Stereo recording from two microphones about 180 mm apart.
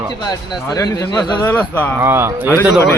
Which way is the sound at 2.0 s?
15° right (ahead or behind).